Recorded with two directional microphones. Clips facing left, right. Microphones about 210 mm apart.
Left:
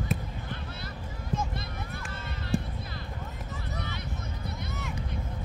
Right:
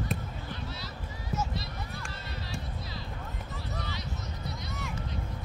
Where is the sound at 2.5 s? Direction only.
35° left (ahead or behind).